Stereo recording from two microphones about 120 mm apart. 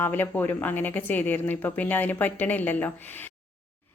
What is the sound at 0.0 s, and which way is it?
A woman's voice, 15° left (ahead or behind).